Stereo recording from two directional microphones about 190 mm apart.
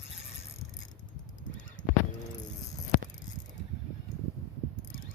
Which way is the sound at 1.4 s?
45° left (ahead or behind).